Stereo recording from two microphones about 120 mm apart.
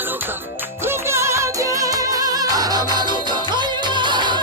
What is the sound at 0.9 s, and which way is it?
Music, 20° right (ahead or behind).